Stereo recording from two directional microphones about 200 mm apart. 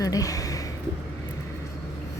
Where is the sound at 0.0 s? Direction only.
15° left (ahead or behind).